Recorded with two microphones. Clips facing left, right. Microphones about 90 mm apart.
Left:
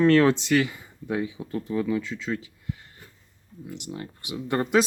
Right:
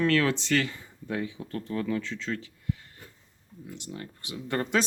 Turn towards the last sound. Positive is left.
turn(degrees=20)  # may be behind; listen again after turning